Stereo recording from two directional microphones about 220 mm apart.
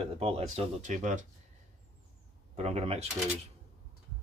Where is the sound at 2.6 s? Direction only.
30° right (ahead or behind).